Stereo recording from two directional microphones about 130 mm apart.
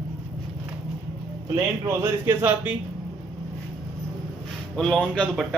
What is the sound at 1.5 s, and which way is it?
A man's voice, 20° right (ahead or behind).